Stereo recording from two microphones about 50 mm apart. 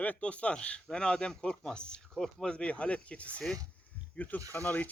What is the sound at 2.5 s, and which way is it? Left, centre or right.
A man's voice, left.